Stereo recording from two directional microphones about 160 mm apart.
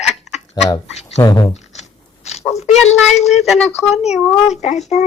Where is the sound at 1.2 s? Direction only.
25° left (ahead or behind).